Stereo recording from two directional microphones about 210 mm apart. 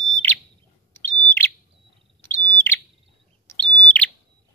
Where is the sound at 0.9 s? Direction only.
10° left (ahead or behind).